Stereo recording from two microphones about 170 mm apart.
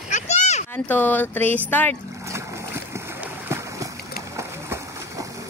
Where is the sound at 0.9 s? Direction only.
10° left (ahead or behind).